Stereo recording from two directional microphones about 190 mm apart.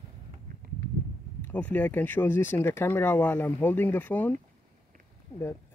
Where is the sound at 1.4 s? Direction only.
10° left (ahead or behind).